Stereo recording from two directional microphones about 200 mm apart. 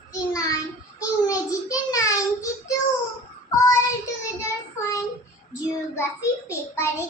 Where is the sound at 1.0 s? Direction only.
15° left (ahead or behind).